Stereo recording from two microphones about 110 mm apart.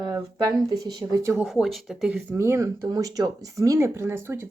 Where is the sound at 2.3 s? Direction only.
25° right (ahead or behind).